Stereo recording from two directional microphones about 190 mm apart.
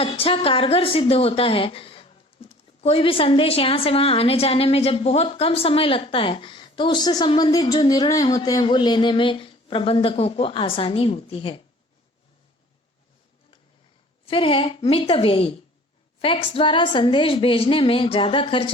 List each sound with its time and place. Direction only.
0.0 s a woman's voice: 30° left (ahead or behind)
14.3 s a woman's voice: 30° left (ahead or behind)